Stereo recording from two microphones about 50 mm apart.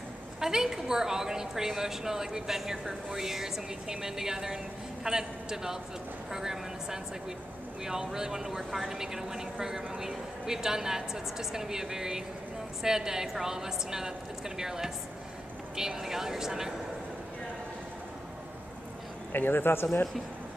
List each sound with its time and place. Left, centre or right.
0.4 s a man's voice: centre
19.3 s a man's voice: left